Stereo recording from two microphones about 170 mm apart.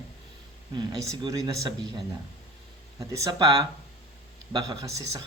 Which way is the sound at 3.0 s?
20° right (ahead or behind).